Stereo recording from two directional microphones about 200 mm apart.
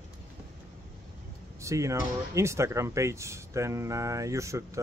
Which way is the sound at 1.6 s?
15° right (ahead or behind).